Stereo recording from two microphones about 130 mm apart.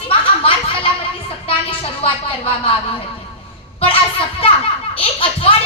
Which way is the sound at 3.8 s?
45° left (ahead or behind).